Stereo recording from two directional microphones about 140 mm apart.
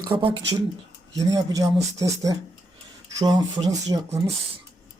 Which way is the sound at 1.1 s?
25° right (ahead or behind).